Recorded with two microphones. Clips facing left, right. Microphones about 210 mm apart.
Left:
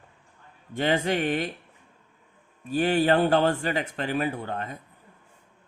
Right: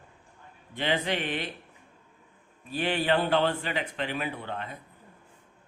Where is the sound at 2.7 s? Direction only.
45° left (ahead or behind).